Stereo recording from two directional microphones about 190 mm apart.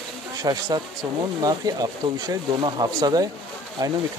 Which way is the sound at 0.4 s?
20° right (ahead or behind).